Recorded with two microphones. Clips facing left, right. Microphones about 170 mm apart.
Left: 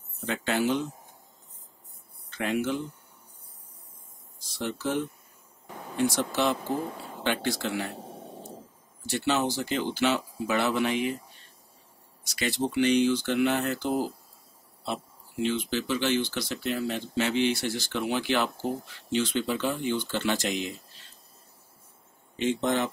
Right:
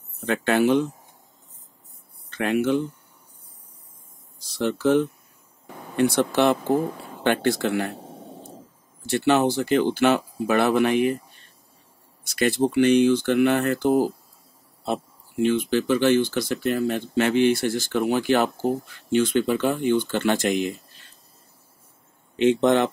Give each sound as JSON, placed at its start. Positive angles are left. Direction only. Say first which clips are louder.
{"t": 0.2, "sound": "speech", "louder": "right 7 dB", "side_deg": -60}
{"t": 2.3, "sound": "speech", "louder": "right 7 dB", "side_deg": -65}
{"t": 4.6, "sound": "speech", "louder": "right 9 dB", "side_deg": -65}
{"t": 9.1, "sound": "speech", "louder": "right 7 dB", "side_deg": -60}
{"t": 12.3, "sound": "speech", "louder": "right 8 dB", "side_deg": -55}
{"t": 15.4, "sound": "speech", "louder": "right 7 dB", "side_deg": -55}
{"t": 22.4, "sound": "speech", "louder": "right 8 dB", "side_deg": -70}